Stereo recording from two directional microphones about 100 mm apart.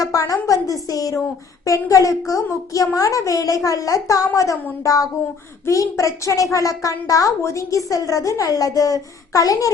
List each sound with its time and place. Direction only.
0.0 s a woman's voice: 35° left (ahead or behind)